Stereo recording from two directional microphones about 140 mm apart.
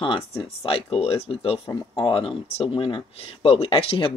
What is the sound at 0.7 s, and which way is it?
Speech, 45° left (ahead or behind).